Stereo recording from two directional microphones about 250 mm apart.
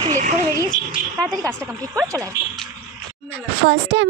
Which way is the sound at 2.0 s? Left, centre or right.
Centre.